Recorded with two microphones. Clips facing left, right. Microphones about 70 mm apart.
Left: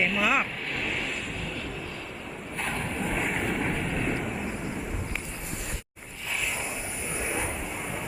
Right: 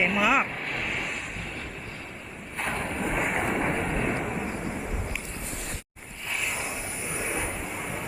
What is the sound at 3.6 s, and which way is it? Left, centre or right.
Vehicle, right.